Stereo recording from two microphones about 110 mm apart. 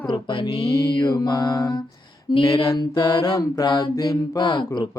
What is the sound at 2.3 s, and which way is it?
Music, 50° left (ahead or behind).